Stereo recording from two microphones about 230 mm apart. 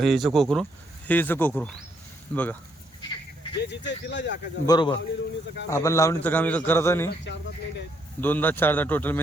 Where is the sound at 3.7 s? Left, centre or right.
Left.